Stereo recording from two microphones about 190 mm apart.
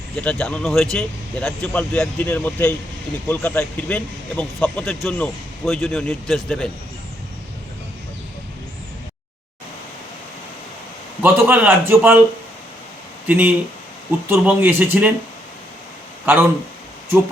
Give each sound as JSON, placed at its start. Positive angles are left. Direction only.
{"t": 0.2, "sound": "speech", "side_deg": 5}
{"t": 11.2, "sound": "a man's voice", "side_deg": -10}
{"t": 13.2, "sound": "a man's voice", "side_deg": -10}
{"t": 16.2, "sound": "speech", "side_deg": -10}